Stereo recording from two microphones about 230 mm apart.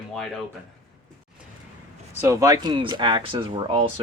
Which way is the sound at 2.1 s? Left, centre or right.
Centre.